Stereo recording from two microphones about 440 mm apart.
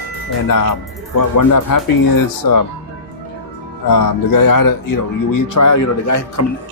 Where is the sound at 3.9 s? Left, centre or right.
Left.